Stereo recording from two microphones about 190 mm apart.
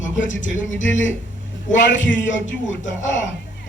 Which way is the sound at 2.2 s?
40° left (ahead or behind).